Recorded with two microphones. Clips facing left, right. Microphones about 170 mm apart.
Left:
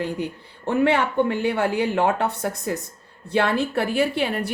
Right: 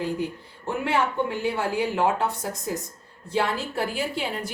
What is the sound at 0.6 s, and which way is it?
A woman's voice, 65° left (ahead or behind).